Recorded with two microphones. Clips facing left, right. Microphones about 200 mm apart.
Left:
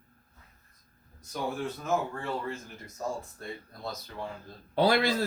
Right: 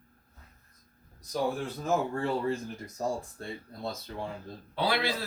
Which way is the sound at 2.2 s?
30° right (ahead or behind).